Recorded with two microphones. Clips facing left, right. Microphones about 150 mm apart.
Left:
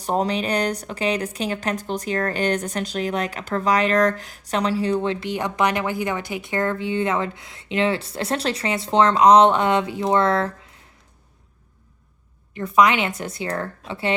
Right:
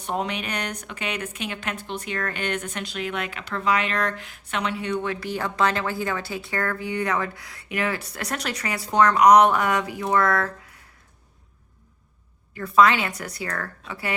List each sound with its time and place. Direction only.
0.0 s a woman's voice: 35° left (ahead or behind)
12.5 s a woman's voice: 20° left (ahead or behind)